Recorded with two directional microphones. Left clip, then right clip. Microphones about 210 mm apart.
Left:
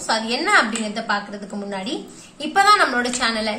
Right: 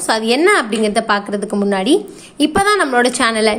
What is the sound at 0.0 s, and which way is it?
A woman's voice, 45° right (ahead or behind).